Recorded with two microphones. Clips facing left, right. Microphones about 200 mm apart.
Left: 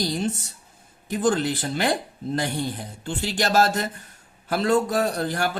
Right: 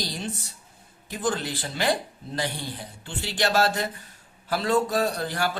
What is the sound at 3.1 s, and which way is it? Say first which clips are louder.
Speech: left 2 dB; 45° left (ahead or behind).